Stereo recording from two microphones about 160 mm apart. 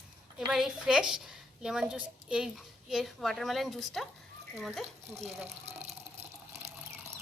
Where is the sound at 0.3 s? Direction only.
Centre (ahead or behind).